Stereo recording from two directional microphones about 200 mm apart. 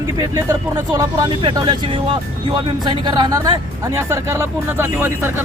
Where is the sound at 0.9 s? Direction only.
20° right (ahead or behind).